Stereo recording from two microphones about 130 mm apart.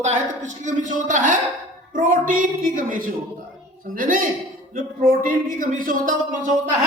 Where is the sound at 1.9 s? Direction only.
90° right.